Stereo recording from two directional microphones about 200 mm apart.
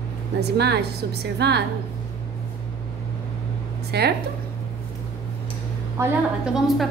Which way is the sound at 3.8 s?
55° right (ahead or behind).